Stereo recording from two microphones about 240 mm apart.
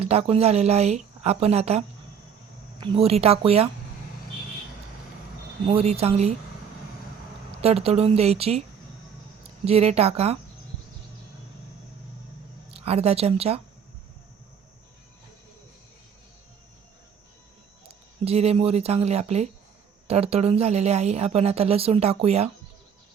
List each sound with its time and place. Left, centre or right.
0.0 s a woman's voice: right
2.8 s a woman's voice: right
5.6 s a woman's voice: right
7.6 s a woman's voice: right
9.6 s a woman's voice: right
12.7 s a woman's voice: right
18.3 s a woman's voice: right